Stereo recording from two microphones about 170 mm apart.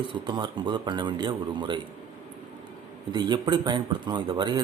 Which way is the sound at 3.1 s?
25° right (ahead or behind).